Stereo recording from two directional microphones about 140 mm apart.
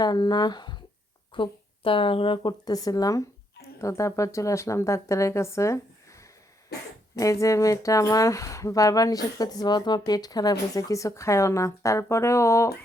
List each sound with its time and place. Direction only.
0.0 s speech: 30° left (ahead or behind)
7.2 s speech: 25° left (ahead or behind)